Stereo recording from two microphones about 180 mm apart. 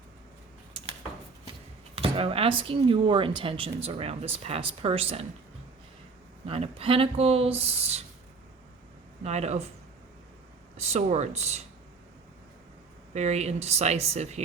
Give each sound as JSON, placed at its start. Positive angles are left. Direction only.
{"t": 2.0, "sound": "speech", "side_deg": -35}
{"t": 6.4, "sound": "speech", "side_deg": -35}
{"t": 9.2, "sound": "speech", "side_deg": -35}
{"t": 10.8, "sound": "speech", "side_deg": -35}
{"t": 13.1, "sound": "speech", "side_deg": -40}